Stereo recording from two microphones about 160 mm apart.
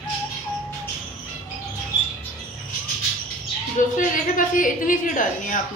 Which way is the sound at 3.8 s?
55° left (ahead or behind).